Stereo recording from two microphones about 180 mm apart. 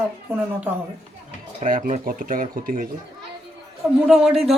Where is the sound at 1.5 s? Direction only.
45° right (ahead or behind).